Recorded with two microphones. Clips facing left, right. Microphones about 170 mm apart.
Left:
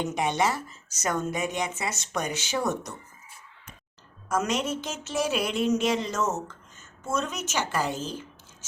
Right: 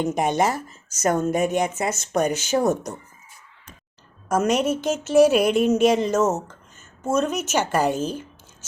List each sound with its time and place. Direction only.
0.0 s speech: 45° right (ahead or behind)
4.3 s speech: 45° right (ahead or behind)